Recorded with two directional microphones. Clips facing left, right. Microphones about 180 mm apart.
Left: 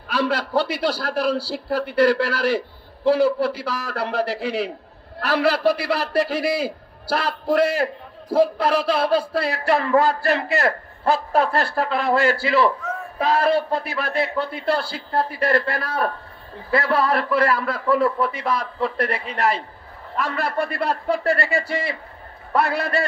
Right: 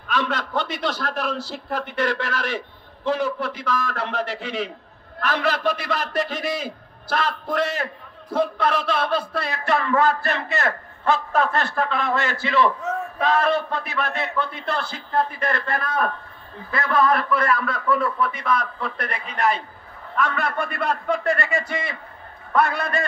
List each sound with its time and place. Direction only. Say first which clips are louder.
0.1 s a man's voice: left 3 dB; 35° left (ahead or behind)